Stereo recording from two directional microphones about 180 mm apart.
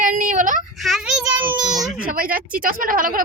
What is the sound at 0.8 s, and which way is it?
A child's voice, centre (ahead or behind).